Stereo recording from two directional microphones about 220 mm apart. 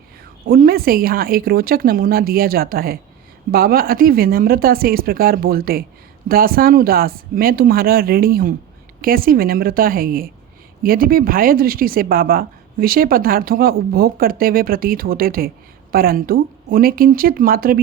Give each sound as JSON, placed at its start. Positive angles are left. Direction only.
{"t": 0.4, "sound": "speech", "side_deg": -45}